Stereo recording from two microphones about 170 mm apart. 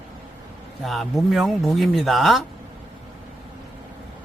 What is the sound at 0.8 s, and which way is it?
Speech, centre (ahead or behind).